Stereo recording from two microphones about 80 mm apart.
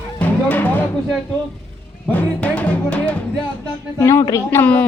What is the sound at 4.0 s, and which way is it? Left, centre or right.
Speech, left.